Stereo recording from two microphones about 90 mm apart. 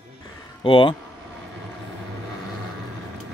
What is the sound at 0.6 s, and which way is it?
Speech, 70° left (ahead or behind).